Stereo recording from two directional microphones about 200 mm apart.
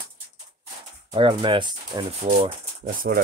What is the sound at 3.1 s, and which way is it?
Speech, 50° right (ahead or behind).